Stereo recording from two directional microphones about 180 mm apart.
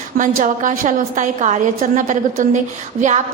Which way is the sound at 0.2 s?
45° right (ahead or behind).